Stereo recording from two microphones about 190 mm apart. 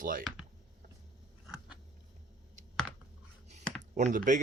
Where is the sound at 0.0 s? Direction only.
45° right (ahead or behind).